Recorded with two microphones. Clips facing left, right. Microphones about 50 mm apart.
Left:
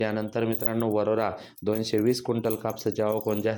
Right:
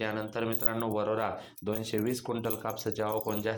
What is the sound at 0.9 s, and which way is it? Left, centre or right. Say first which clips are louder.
Speech: left 6 dB; left.